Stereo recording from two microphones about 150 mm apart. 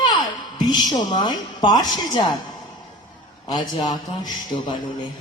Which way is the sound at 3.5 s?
30° left (ahead or behind).